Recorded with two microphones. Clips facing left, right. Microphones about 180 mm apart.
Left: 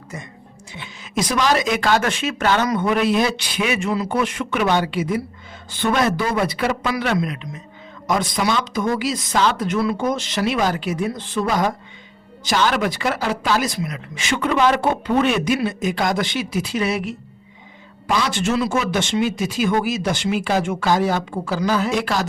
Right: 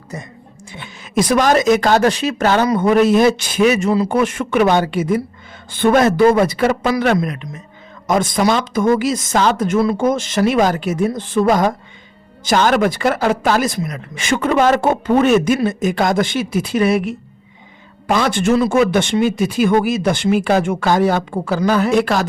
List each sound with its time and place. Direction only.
0.7 s speech: 50° right (ahead or behind); by 4.2 s 35° right (ahead or behind)
4.2 s speech: 50° right (ahead or behind)